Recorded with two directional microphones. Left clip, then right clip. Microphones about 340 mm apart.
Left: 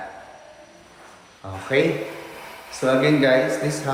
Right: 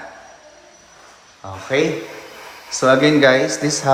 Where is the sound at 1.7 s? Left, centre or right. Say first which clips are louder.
Right 2 dB; centre.